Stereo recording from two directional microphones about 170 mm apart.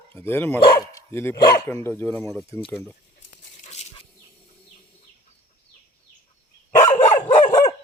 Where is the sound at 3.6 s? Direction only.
40° left (ahead or behind).